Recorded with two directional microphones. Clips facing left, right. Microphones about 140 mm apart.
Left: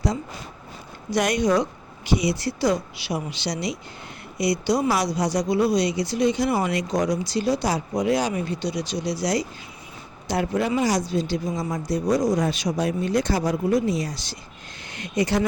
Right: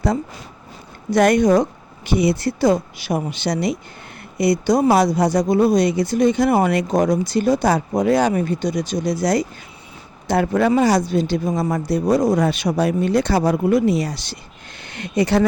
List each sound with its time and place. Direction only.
1.1 s speech: 55° right (ahead or behind)